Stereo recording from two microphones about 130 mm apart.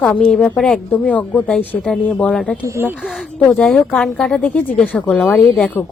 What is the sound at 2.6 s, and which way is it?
Speech, 20° right (ahead or behind).